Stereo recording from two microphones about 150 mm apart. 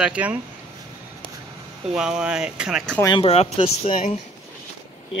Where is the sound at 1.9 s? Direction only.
5° right (ahead or behind).